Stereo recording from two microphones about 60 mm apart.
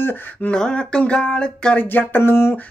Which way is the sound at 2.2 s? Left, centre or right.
Left.